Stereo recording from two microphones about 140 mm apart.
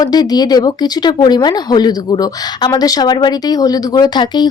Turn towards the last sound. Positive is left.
turn(degrees=30)  # may be behind; listen again after turning